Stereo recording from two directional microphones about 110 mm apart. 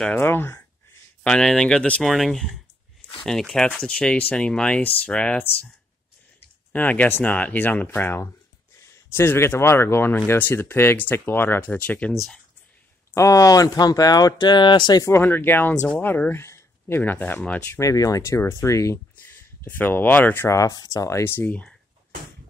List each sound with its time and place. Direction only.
0.0 s speech: 15° left (ahead or behind)
1.2 s speech: 5° left (ahead or behind)
6.7 s speech: 15° left (ahead or behind)
12.1 s speech: centre (ahead or behind)
13.1 s speech: 30° left (ahead or behind)
15.0 s speech: 20° left (ahead or behind)
17.7 s speech: 30° left (ahead or behind)
19.6 s speech: 15° left (ahead or behind)
20.4 s speech: 30° left (ahead or behind)
21.2 s speech: 15° left (ahead or behind)